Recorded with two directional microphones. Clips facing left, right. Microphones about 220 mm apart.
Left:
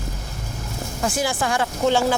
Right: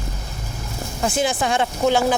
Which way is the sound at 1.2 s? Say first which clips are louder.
Right 3 dB; 20° right (ahead or behind).